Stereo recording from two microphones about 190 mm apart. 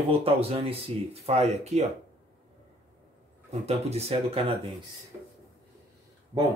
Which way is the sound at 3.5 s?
35° right (ahead or behind).